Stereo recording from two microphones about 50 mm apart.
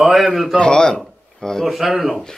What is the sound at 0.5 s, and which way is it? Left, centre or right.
A man's voice, centre.